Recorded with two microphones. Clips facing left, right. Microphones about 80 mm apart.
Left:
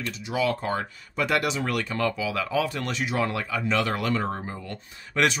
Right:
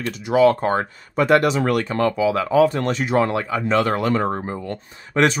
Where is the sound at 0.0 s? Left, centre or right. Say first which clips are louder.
Right 11 dB; right.